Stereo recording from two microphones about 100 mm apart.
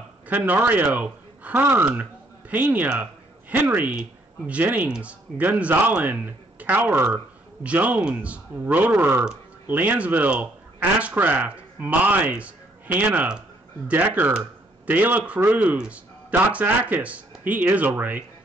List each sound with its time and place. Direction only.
0.3 s a man's voice: 20° right (ahead or behind)